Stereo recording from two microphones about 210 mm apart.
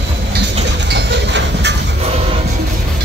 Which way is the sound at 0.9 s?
55° right (ahead or behind).